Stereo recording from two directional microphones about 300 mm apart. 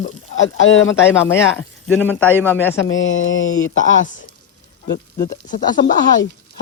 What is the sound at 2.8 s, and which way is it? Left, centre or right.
Speech, left.